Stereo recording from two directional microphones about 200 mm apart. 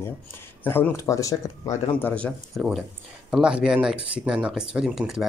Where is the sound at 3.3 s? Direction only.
5° right (ahead or behind).